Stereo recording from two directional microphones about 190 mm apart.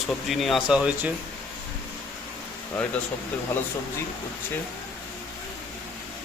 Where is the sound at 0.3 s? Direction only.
Centre (ahead or behind).